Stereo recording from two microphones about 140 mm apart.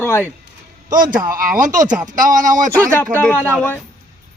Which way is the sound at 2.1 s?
65° right (ahead or behind).